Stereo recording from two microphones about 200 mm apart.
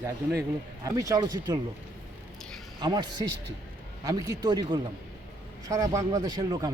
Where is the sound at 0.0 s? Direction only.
10° right (ahead or behind).